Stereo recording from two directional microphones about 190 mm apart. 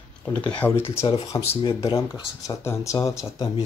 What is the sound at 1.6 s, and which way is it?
Speech, 25° left (ahead or behind).